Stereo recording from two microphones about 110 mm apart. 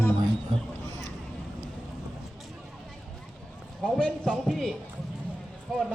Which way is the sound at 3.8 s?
5° left (ahead or behind).